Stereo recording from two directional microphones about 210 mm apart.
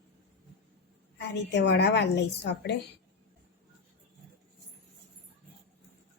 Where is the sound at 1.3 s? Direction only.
55° left (ahead or behind).